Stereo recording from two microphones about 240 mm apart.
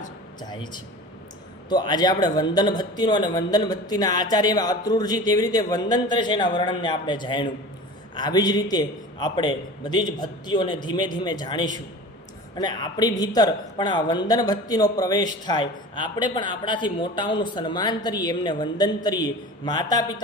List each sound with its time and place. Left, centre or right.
0.4 s a man's voice: centre